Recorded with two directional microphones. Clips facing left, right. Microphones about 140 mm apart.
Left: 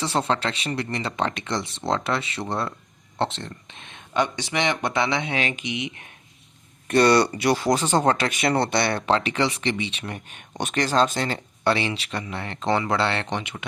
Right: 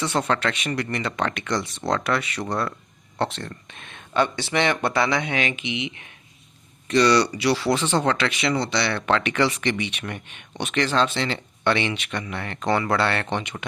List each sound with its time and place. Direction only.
0.0 s speech: 30° left (ahead or behind)
10.6 s speech: 40° left (ahead or behind); by 13.2 s 25° left (ahead or behind)
13.3 s speech: 10° left (ahead or behind)